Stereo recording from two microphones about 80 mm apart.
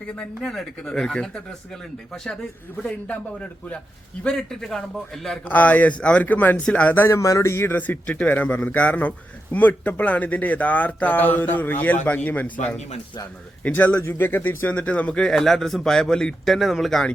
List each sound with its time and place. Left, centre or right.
0.2 s a man's voice: centre
5.5 s speech: left
6.9 s speech: left
7.2 s speech: left; by 17.1 s centre